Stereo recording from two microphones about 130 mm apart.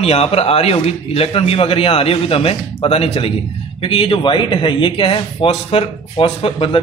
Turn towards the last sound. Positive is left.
turn(degrees=45)  # may be behind; listen again after turning